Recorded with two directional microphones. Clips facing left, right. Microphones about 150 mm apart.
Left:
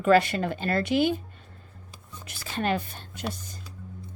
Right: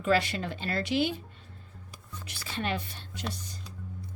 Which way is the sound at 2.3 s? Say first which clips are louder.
Left 5 dB; 45° left (ahead or behind).